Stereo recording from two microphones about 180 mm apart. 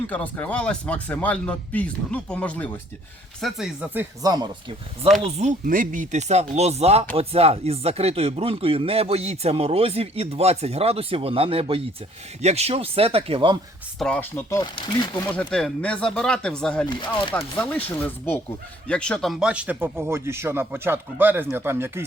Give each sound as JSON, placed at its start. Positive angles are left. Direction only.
{"t": 0.1, "sound": "speech", "side_deg": 5}
{"t": 3.4, "sound": "speech", "side_deg": -5}
{"t": 4.2, "sound": "speech", "side_deg": -20}
{"t": 5.2, "sound": "speech", "side_deg": -40}
{"t": 14.0, "sound": "a man's voice", "side_deg": 10}